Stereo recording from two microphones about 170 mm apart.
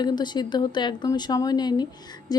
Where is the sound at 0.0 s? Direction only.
25° left (ahead or behind).